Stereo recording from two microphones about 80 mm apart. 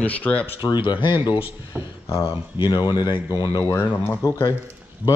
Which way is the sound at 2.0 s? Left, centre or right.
Left.